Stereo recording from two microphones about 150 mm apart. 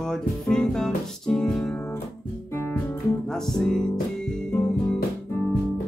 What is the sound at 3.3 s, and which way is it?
Music, 5° left (ahead or behind).